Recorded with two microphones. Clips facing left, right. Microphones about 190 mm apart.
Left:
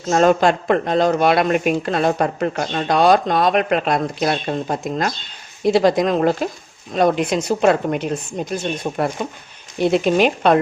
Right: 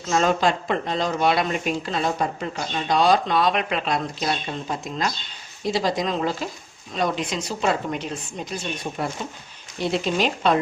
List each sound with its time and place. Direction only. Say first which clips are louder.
0.1 s speech: left 6 dB; 50° left (ahead or behind)